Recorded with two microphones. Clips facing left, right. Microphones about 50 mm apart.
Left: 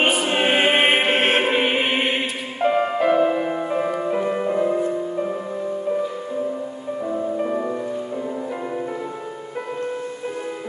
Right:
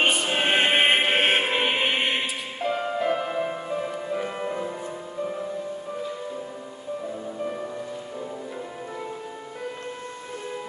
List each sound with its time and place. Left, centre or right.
0.0 s choir: centre
1.4 s music: centre
2.6 s music: left
3.2 s music: centre
3.5 s music: left